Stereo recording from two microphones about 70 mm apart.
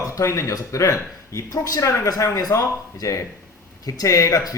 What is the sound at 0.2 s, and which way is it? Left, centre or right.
Speech, left.